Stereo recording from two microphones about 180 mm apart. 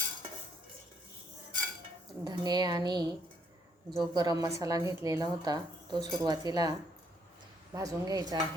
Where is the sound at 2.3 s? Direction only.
20° right (ahead or behind).